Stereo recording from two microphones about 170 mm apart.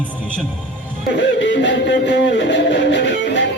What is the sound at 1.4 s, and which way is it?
Music, 90° left.